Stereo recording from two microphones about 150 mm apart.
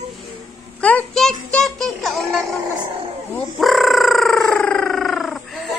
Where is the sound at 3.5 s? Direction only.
Centre (ahead or behind).